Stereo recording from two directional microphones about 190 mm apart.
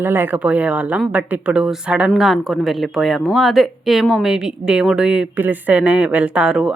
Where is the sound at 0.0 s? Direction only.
10° right (ahead or behind).